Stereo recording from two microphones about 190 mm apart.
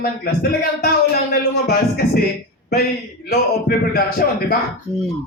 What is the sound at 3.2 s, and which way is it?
Speech, 55° left (ahead or behind).